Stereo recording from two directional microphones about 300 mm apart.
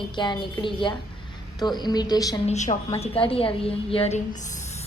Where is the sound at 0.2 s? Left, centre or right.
Centre.